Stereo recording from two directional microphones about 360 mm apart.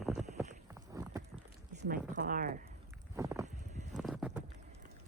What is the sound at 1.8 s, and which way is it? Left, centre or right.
Speech, right.